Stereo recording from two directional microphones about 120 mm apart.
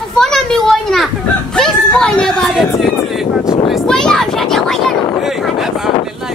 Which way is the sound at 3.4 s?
35° left (ahead or behind).